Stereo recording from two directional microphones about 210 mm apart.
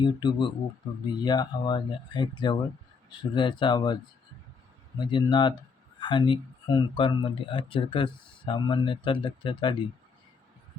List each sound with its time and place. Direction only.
0.0 s speech: 20° left (ahead or behind)
4.9 s speech: 20° left (ahead or behind)